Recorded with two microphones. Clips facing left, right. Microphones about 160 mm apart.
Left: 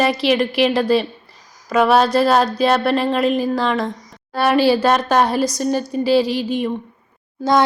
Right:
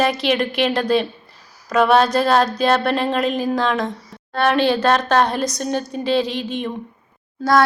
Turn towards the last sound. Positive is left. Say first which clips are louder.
# even
turn(degrees=20)  # may be behind; listen again after turning